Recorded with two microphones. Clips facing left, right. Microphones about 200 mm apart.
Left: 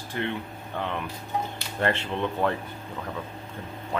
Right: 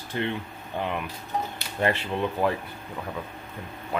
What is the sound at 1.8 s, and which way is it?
Speech, 10° right (ahead or behind).